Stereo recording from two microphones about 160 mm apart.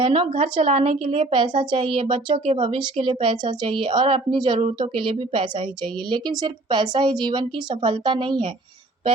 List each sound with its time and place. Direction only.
0.0 s speech: 35° right (ahead or behind)